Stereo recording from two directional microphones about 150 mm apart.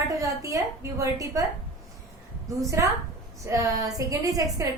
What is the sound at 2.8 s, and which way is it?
A woman's voice, 20° right (ahead or behind).